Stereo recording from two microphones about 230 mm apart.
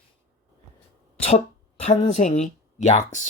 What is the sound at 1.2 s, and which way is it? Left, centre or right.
Speech, left.